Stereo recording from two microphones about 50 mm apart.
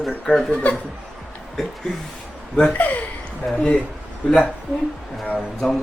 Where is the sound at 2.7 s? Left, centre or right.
Left.